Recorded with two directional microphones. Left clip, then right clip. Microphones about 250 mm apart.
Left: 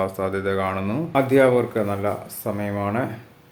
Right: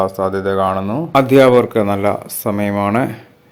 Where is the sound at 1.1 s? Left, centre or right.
Right.